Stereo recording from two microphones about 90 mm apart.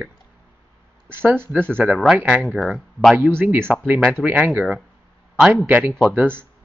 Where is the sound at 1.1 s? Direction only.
25° right (ahead or behind).